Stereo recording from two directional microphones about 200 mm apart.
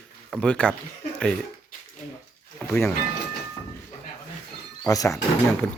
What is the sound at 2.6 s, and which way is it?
Speech, 10° left (ahead or behind).